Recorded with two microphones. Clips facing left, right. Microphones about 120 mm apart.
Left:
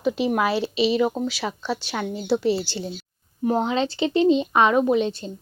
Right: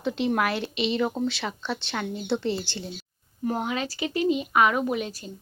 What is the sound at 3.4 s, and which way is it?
A woman's voice, 20° left (ahead or behind).